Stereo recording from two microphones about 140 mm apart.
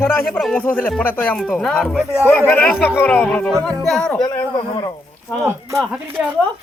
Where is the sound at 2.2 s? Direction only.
15° left (ahead or behind).